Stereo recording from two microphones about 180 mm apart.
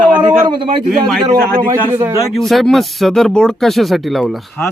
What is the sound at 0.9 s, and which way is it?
Speech, centre (ahead or behind).